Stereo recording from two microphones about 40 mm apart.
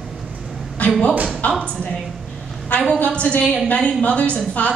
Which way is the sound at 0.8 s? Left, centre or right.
Left.